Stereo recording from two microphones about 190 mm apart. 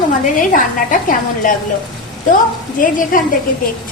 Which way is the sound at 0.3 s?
45° left (ahead or behind).